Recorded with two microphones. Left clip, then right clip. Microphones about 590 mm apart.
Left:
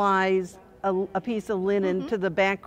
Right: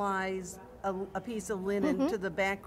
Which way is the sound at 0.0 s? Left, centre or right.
Left.